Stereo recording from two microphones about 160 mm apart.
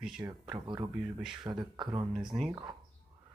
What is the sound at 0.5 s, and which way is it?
Speech, 25° right (ahead or behind).